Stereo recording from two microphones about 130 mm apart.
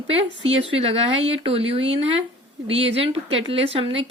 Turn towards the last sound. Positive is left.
turn(degrees=-45)  # may be behind; listen again after turning